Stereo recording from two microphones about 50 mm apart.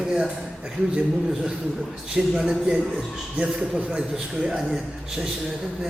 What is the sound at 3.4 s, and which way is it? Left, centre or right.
A man's voice, right.